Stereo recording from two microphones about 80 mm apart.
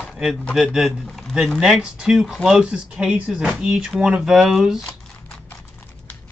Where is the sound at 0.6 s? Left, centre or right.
Centre.